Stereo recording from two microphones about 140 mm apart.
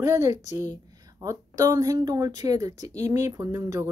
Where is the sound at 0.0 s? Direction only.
20° right (ahead or behind).